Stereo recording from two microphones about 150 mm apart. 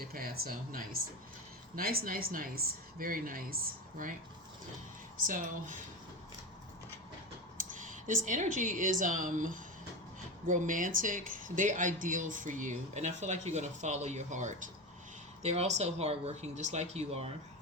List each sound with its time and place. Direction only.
0.0 s speech: 80° right
5.2 s speech: 60° right (ahead or behind)
7.7 s speech: 60° right (ahead or behind)